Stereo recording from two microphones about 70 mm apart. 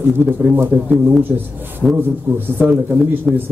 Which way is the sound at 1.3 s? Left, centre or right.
Right.